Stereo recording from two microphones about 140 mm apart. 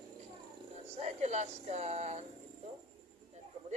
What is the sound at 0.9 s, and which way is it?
Speech, 55° right (ahead or behind).